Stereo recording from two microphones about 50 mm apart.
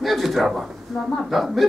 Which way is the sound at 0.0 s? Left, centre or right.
Centre.